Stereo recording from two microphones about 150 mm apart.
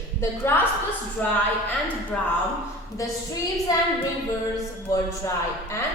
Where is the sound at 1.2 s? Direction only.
10° left (ahead or behind).